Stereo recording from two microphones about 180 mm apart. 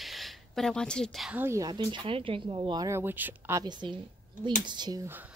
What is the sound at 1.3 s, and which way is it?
Speech, 15° right (ahead or behind).